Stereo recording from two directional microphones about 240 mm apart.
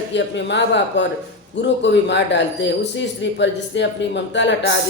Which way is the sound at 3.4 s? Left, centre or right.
Left.